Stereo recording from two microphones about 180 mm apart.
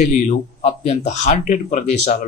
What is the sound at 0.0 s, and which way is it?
A man's voice, 40° left (ahead or behind).